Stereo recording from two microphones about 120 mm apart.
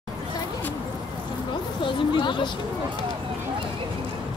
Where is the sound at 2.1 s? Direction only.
40° left (ahead or behind).